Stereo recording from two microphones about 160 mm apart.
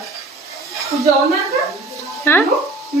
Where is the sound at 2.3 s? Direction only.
15° left (ahead or behind).